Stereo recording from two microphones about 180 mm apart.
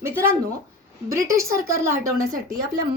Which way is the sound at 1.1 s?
15° right (ahead or behind).